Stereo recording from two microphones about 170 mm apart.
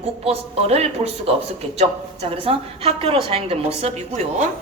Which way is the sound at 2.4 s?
35° right (ahead or behind).